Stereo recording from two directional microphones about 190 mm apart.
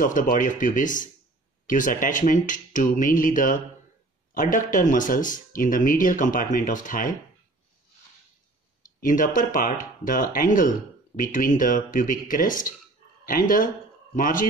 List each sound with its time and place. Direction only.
0.0 s speech: 45° left (ahead or behind)
9.0 s speech: 45° left (ahead or behind)
14.1 s speech: 45° left (ahead or behind)